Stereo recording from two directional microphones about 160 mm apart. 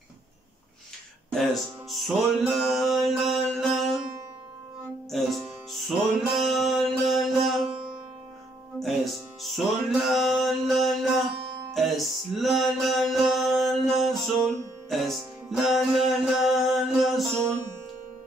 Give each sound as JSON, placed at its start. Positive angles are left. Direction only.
{"t": 1.3, "sound": "music", "side_deg": 0}
{"t": 5.1, "sound": "music", "side_deg": 0}